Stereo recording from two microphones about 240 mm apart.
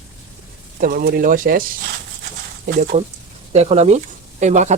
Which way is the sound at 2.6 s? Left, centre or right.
Right.